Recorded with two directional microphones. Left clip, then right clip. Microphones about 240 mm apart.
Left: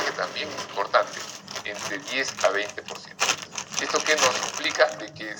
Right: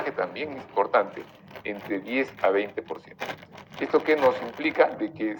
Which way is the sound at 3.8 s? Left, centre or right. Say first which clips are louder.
Even; right.